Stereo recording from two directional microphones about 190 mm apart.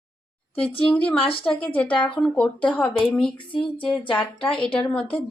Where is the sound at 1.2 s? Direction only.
30° left (ahead or behind).